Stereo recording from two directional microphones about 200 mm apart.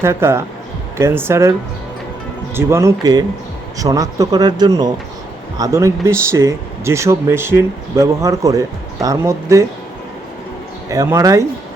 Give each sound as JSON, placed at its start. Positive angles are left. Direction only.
{"t": 0.0, "sound": "speech", "side_deg": -15}
{"t": 2.6, "sound": "speech", "side_deg": -15}
{"t": 10.8, "sound": "speech", "side_deg": -15}